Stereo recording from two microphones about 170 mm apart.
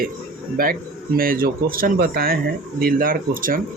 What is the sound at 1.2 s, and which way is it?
A man's voice, 60° right (ahead or behind).